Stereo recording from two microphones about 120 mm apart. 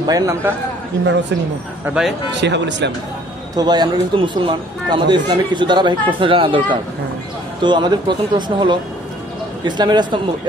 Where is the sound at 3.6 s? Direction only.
35° right (ahead or behind).